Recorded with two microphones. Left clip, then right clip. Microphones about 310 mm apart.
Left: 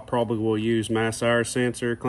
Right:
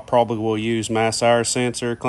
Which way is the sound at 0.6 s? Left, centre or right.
Right.